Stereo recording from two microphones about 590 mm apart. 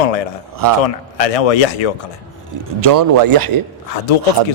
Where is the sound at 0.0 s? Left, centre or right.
Left.